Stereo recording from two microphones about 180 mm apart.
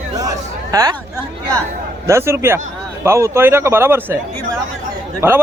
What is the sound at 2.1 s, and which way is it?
A man's voice, 15° right (ahead or behind).